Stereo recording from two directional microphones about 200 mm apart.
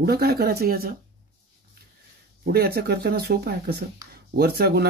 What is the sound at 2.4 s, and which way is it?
Speech, 50° right (ahead or behind).